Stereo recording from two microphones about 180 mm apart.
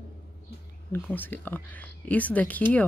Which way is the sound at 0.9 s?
10° left (ahead or behind).